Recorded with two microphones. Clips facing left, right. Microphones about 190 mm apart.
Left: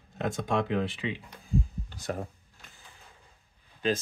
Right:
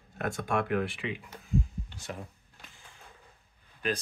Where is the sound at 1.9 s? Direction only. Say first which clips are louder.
Left 7 dB; 40° left (ahead or behind).